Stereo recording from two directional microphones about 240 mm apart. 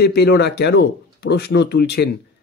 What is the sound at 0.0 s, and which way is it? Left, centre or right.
A man's voice, left.